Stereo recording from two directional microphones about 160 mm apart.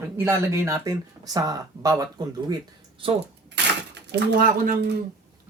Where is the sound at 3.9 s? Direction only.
90° right; by 5.0 s 75° right (ahead or behind).